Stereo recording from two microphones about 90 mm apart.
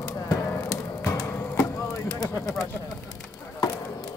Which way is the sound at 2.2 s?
40° left (ahead or behind).